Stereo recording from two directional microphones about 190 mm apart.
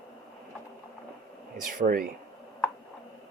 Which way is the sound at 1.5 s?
45° right (ahead or behind).